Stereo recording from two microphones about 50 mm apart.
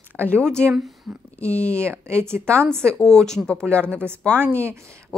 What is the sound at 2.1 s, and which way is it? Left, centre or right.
Speech, right.